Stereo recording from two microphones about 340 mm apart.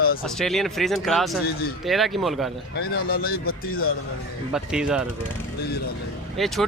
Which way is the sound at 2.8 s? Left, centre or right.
Left.